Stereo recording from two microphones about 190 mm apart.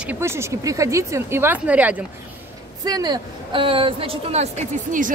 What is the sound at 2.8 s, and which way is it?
Speech, 20° right (ahead or behind).